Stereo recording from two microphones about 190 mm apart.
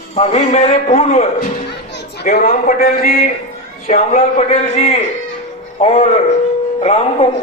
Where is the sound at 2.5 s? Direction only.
45° left (ahead or behind).